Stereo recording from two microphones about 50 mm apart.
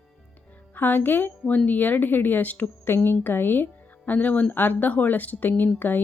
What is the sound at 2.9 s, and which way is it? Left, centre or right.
A woman's voice, left.